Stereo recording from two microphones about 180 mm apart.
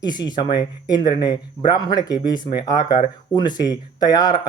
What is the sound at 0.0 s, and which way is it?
Speech, 25° left (ahead or behind).